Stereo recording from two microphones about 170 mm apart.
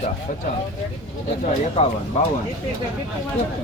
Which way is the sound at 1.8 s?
40° left (ahead or behind).